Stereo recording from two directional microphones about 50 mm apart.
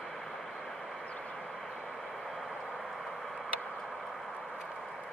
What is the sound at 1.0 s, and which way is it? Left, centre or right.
Vehicle, left.